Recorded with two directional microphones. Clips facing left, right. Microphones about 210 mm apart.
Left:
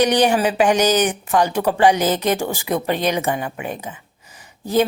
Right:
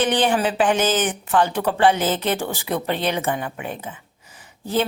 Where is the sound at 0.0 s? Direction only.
15° left (ahead or behind).